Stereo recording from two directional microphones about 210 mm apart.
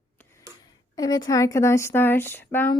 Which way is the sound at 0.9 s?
20° left (ahead or behind).